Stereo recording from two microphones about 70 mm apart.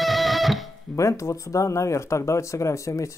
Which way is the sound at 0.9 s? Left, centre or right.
Left.